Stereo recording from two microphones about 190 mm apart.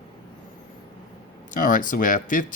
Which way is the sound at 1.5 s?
45° left (ahead or behind).